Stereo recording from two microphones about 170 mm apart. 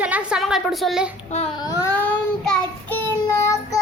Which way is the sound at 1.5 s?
25° left (ahead or behind).